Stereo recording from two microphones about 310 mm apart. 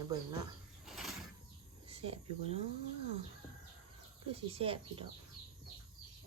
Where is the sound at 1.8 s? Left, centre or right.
Centre.